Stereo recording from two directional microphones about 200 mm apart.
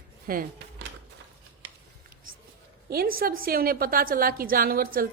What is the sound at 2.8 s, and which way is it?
A woman's voice, 50° right (ahead or behind).